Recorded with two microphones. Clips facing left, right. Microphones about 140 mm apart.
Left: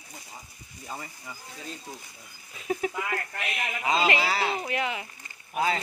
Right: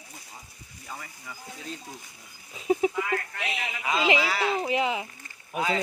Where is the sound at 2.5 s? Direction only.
20° right (ahead or behind).